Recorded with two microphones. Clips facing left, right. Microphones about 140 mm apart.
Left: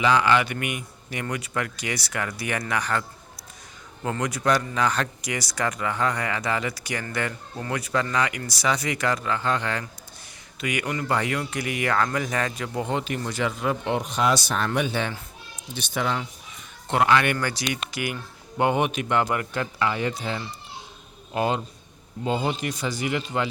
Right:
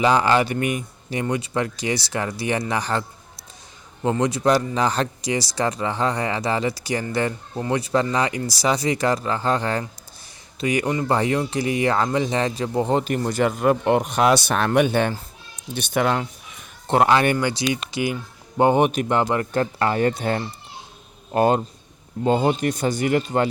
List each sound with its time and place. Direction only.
0.0 s a man's voice: 35° right (ahead or behind); by 16.2 s 55° right (ahead or behind)
16.9 s speech: 35° right (ahead or behind)